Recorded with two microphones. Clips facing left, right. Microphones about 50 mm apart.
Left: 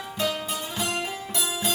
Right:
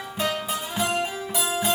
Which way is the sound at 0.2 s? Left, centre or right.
Centre.